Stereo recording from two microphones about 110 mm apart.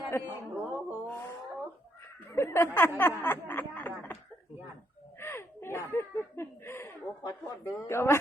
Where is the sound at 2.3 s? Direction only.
25° left (ahead or behind).